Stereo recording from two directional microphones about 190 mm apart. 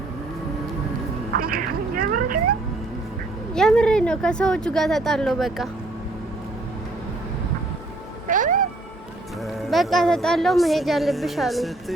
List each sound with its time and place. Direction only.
1.3 s a sound: 50° right (ahead or behind)
3.5 s a woman's voice: 5° left (ahead or behind)
8.3 s meow: 45° right (ahead or behind)
9.6 s a woman's voice: centre (ahead or behind)